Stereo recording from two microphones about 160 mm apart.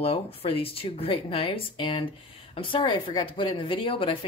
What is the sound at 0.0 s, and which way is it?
Speech, 35° left (ahead or behind).